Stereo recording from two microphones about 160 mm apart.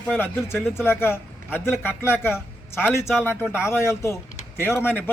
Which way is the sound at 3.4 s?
5° right (ahead or behind).